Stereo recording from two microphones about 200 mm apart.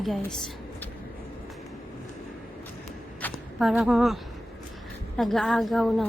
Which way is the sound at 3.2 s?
10° left (ahead or behind).